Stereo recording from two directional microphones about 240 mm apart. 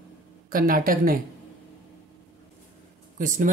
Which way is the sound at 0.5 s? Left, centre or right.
Right.